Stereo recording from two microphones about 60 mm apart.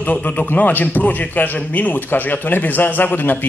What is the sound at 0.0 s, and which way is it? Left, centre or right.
A man's voice, left.